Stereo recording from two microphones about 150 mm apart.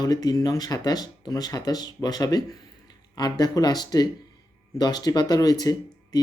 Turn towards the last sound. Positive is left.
turn(degrees=25)  # may be behind; listen again after turning